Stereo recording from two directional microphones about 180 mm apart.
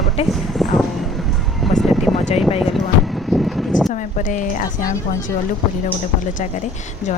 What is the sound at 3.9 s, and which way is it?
Speech, 45° left (ahead or behind).